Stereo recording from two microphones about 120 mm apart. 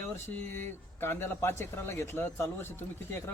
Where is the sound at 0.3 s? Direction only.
15° left (ahead or behind).